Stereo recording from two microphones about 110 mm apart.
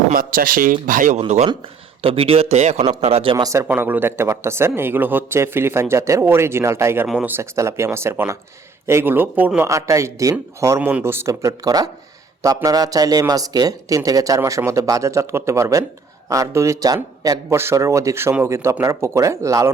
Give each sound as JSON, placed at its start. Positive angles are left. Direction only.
{"t": 1.3, "sound": "speech", "side_deg": -75}
{"t": 2.0, "sound": "speech", "side_deg": -55}
{"t": 3.0, "sound": "speech", "side_deg": -60}
{"t": 3.3, "sound": "speech", "side_deg": -30}
{"t": 3.7, "sound": "speech", "side_deg": -15}
{"t": 9.6, "sound": "speech", "side_deg": -30}
{"t": 10.8, "sound": "speech", "side_deg": -15}